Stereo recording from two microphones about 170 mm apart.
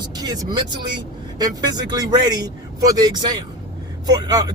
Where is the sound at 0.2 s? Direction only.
25° right (ahead or behind).